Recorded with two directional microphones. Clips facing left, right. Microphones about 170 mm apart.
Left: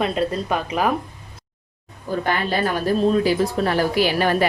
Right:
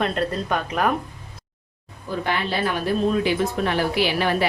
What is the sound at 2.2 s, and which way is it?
A woman's voice, 45° left (ahead or behind).